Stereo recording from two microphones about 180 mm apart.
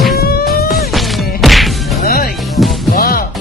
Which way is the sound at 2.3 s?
Centre (ahead or behind).